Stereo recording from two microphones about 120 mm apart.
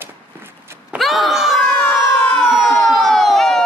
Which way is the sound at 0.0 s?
20° right (ahead or behind).